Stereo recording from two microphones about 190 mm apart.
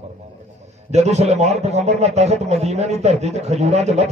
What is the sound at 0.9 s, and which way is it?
A man's voice, 35° right (ahead or behind).